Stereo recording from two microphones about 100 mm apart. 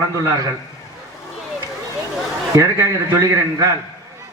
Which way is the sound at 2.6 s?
30° right (ahead or behind).